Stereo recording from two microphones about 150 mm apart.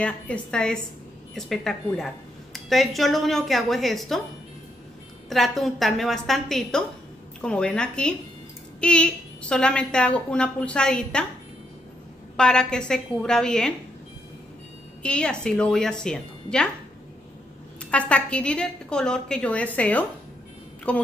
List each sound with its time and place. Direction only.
0.0 s speech: 5° left (ahead or behind)
5.3 s a woman's voice: centre (ahead or behind)
12.4 s speech: 5° left (ahead or behind)
15.0 s speech: 5° left (ahead or behind)
17.9 s a woman's voice: 10° left (ahead or behind)